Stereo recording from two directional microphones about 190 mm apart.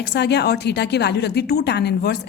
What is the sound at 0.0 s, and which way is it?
A woman's voice, 65° left (ahead or behind).